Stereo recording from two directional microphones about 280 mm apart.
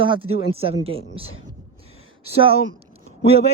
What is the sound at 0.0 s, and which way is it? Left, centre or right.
A man's voice, centre.